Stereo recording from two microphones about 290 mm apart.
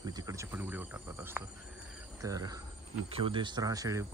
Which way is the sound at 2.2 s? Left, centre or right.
Centre.